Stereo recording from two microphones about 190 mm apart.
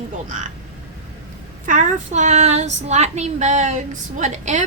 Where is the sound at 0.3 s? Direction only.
40° right (ahead or behind).